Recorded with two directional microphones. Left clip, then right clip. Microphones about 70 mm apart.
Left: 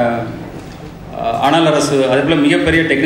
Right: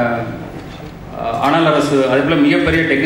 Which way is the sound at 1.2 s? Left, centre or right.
Left.